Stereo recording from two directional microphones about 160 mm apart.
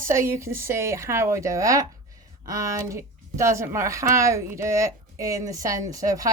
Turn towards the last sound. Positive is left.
turn(degrees=-20)  # may be behind; listen again after turning